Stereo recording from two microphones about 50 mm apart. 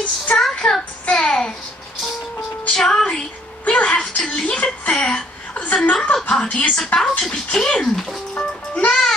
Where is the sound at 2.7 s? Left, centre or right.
Centre.